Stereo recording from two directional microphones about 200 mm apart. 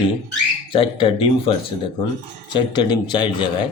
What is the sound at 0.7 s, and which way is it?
Speech, 25° left (ahead or behind).